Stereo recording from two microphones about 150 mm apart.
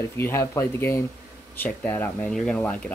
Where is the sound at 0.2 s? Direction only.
20° left (ahead or behind).